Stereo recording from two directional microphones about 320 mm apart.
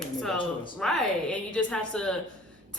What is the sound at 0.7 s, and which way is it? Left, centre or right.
A woman's voice, centre.